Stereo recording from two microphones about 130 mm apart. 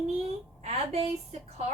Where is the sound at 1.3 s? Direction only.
60° right (ahead or behind).